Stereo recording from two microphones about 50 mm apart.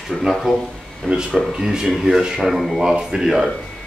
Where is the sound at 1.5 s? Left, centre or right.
Centre.